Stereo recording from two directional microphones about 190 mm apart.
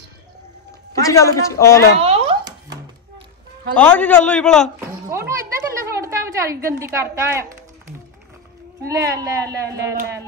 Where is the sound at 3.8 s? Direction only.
5° left (ahead or behind).